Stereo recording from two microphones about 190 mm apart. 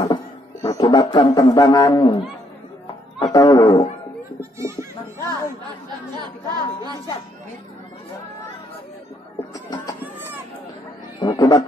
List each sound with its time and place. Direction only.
0.0 s music: 15° left (ahead or behind)
3.2 s speech: 20° left (ahead or behind)
4.4 s speech: 15° right (ahead or behind)
6.1 s speech: 20° right (ahead or behind)
11.1 s music: 20° left (ahead or behind)